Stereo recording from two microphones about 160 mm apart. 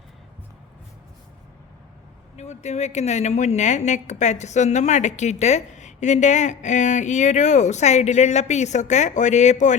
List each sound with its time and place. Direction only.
2.3 s a woman's voice: 45° left (ahead or behind)